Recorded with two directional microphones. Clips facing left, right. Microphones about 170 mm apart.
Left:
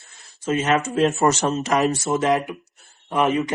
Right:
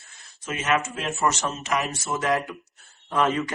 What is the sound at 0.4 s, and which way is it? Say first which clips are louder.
Speech: left 5 dB; 30° left (ahead or behind).